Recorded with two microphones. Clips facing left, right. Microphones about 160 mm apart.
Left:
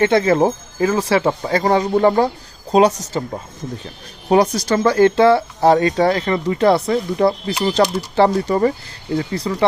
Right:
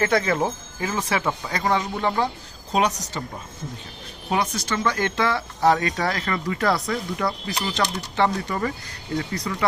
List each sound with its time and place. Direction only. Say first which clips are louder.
0.0 s speech: left 7 dB; 30° left (ahead or behind)
2.7 s speech: left 9 dB; 30° left (ahead or behind)
4.3 s speech: left 10 dB; 35° left (ahead or behind)